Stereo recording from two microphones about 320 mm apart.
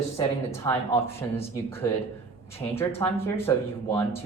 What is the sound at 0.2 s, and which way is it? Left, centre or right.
Speech, centre.